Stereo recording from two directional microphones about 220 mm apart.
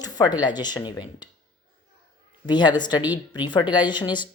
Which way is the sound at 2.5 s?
20° left (ahead or behind).